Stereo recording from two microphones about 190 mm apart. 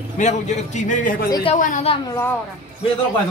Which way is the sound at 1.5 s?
40° left (ahead or behind).